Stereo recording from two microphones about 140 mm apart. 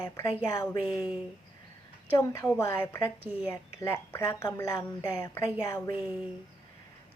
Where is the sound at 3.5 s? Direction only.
20° left (ahead or behind).